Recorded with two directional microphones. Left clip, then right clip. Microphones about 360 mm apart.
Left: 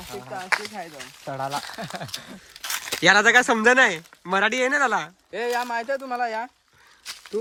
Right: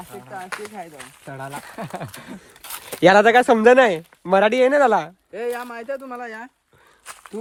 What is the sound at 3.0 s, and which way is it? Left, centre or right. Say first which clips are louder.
Speech: right 3 dB; centre.